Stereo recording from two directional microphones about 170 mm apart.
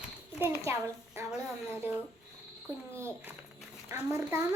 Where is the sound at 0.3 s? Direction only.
15° right (ahead or behind).